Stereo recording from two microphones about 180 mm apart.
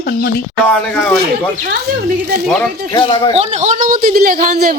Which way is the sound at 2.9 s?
25° left (ahead or behind).